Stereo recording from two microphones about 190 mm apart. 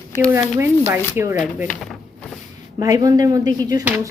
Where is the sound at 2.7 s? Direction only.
20° right (ahead or behind).